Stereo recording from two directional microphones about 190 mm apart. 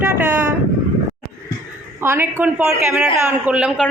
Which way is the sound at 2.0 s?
10° right (ahead or behind).